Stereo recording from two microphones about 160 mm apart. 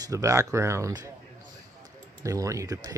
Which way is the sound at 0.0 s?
20° right (ahead or behind).